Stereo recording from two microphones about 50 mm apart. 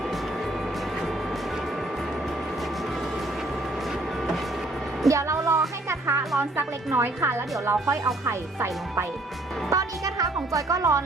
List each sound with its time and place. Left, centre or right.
5.0 s music: right
6.6 s a woman's voice: right
7.6 s speech: right
9.6 s a woman's voice: right